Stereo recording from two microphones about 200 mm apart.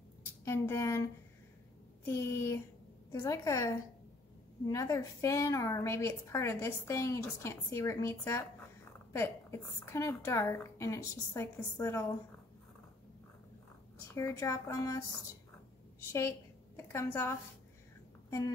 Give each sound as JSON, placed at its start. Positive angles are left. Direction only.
{"t": 0.5, "sound": "a woman's voice", "side_deg": 15}
{"t": 13.9, "sound": "a woman's voice", "side_deg": 15}
{"t": 16.0, "sound": "a woman's voice", "side_deg": 15}